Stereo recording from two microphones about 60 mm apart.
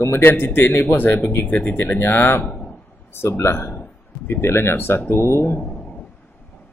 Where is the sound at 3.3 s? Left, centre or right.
Left.